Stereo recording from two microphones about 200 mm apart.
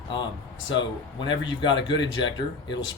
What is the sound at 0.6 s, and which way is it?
Speech, 25° left (ahead or behind).